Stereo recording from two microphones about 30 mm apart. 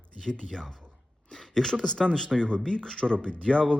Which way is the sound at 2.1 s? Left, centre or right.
Centre.